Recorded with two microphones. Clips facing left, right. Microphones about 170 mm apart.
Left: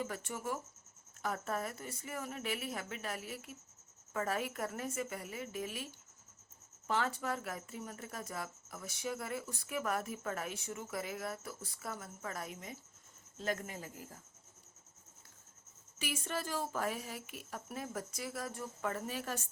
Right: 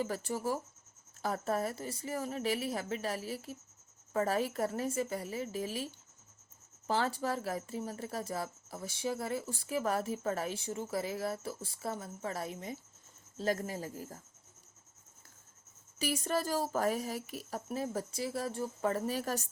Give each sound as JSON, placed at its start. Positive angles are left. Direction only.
{"t": 0.0, "sound": "speech", "side_deg": -35}
{"t": 16.0, "sound": "speech", "side_deg": -40}